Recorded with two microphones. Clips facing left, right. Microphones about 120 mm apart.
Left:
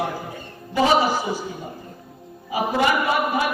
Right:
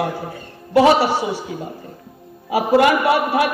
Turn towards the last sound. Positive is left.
turn(degrees=-65)  # may be behind; listen again after turning